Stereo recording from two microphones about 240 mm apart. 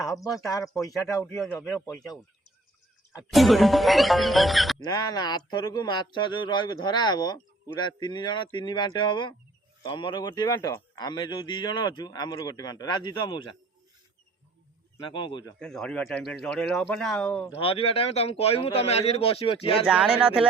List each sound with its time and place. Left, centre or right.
0.0 s a man's voice: centre
1.3 s a man's voice: centre
3.3 s speech: centre
4.8 s a man's voice: centre
15.0 s speech: centre
15.5 s speech: centre
17.6 s speech: left
19.9 s speech: centre